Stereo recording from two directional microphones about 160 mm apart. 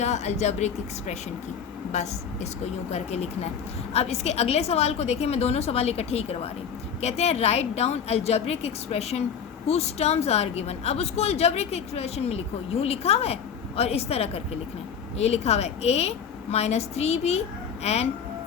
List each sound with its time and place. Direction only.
0.0 s a woman's voice: 45° left (ahead or behind)